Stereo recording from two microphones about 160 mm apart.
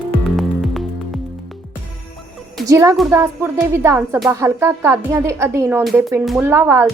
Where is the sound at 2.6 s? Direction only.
20° right (ahead or behind).